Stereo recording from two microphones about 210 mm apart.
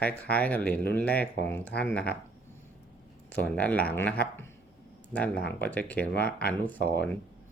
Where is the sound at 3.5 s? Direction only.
5° left (ahead or behind).